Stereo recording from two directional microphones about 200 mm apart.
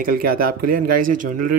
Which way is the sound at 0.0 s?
45° right (ahead or behind).